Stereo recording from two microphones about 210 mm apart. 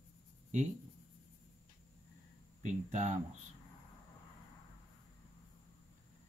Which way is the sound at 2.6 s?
35° right (ahead or behind).